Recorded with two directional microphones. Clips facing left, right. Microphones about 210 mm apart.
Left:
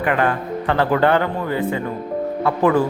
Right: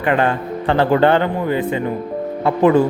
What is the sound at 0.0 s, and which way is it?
A man's voice, 25° right (ahead or behind).